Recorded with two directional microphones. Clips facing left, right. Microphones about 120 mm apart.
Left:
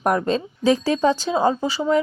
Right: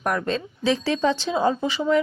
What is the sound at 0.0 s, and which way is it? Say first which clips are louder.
Speech: left 4 dB; 30° left (ahead or behind).